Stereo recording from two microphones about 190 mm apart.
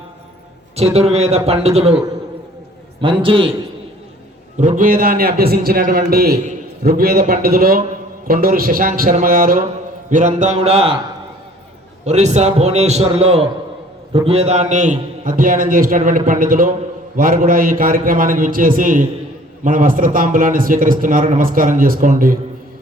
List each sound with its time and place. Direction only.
0.9 s a man's voice: 35° right (ahead or behind)
3.0 s a man's voice: 25° right (ahead or behind)
4.5 s a man's voice: 40° right (ahead or behind)
12.0 s a man's voice: 35° right (ahead or behind)